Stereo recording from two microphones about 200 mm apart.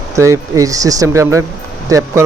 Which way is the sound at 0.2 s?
15° right (ahead or behind).